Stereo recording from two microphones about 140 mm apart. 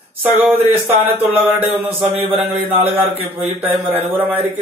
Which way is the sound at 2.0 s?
40° right (ahead or behind).